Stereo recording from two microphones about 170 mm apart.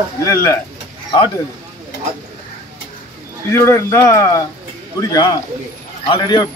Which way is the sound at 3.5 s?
15° left (ahead or behind).